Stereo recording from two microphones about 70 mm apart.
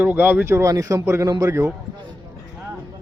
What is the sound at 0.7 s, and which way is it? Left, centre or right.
Speech, right.